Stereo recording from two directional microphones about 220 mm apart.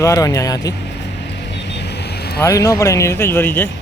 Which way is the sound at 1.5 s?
50° left (ahead or behind).